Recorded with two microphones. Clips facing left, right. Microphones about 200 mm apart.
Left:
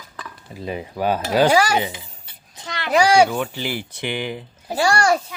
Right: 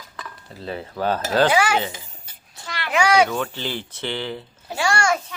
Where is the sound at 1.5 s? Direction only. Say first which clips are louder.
Left 2 dB; 40° left (ahead or behind).